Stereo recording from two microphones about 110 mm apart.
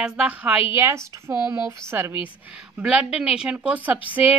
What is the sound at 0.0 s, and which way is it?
A woman's voice, 15° right (ahead or behind).